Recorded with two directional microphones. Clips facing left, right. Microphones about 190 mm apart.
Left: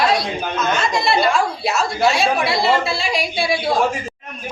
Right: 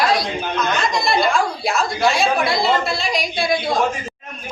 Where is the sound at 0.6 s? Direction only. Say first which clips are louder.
Left 1 dB; 5° left (ahead or behind).